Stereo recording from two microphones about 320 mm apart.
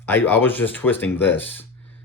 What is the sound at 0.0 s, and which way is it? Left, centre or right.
Speech, centre.